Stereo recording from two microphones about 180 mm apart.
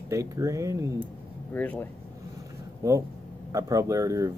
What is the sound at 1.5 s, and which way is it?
Speech, 10° left (ahead or behind).